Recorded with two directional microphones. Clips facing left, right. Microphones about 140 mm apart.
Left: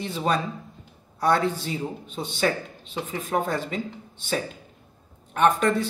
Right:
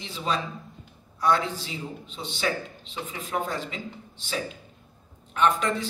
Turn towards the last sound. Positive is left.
turn(degrees=50)  # may be behind; listen again after turning